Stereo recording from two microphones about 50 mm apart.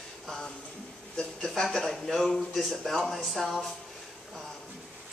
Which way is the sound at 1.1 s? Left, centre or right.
Centre.